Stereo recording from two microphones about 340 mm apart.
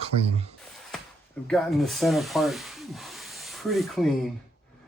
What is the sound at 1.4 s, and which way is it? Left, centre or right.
Speech, centre.